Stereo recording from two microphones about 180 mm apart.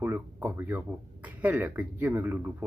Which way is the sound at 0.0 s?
10° right (ahead or behind).